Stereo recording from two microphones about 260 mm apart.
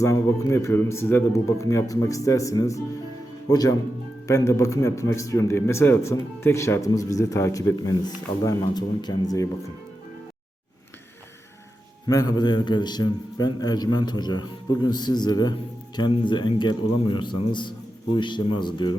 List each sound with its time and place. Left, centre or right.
0.0 s a man's voice: centre
12.0 s a man's voice: centre